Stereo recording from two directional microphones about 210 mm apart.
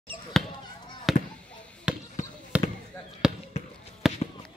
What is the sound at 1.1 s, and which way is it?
Fireworks, centre (ahead or behind).